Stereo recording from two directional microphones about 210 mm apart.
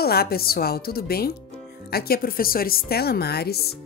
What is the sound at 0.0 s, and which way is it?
Speech, 50° left (ahead or behind).